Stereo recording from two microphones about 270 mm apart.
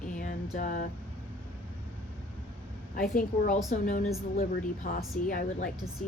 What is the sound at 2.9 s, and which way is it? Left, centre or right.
Speech, left.